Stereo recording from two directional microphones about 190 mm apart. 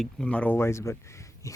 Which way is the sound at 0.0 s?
5° left (ahead or behind).